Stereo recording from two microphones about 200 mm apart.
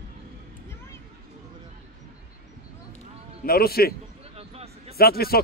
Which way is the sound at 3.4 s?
50° left (ahead or behind).